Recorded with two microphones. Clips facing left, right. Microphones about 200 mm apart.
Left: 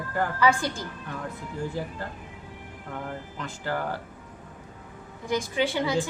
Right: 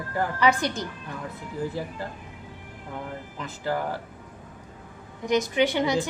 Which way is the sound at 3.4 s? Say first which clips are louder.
Right 3 dB; 5° right (ahead or behind).